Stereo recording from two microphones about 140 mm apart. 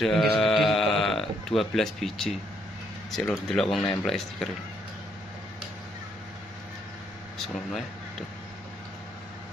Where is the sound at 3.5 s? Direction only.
5° left (ahead or behind).